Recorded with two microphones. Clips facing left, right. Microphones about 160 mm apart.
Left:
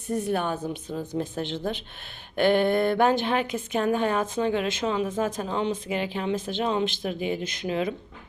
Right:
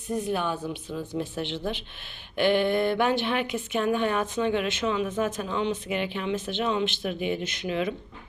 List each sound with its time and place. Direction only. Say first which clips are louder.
0.3 s speech: left 1 dB; 45° left (ahead or behind)